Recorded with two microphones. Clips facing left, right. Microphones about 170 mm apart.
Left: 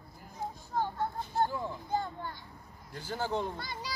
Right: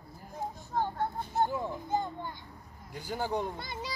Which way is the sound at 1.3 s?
20° right (ahead or behind).